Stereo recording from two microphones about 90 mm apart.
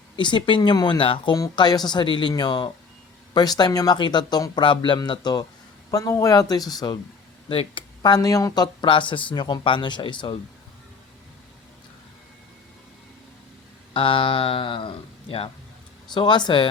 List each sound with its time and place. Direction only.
0.2 s speech: 65° left (ahead or behind)
1.5 s speech: 50° left (ahead or behind)
4.6 s speech: 65° left (ahead or behind)
5.9 s speech: 40° left (ahead or behind)
7.4 s speech: 80° left
8.0 s speech: 45° left (ahead or behind); by 10.3 s 60° left (ahead or behind)
13.9 s speech: 75° left (ahead or behind)
16.1 s speech: 55° left (ahead or behind)